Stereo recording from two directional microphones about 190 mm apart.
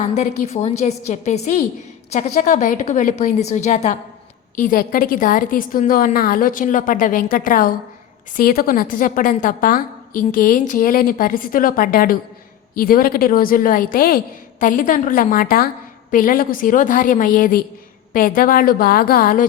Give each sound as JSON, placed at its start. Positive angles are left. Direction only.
{"t": 0.0, "sound": "a woman's voice", "side_deg": 40}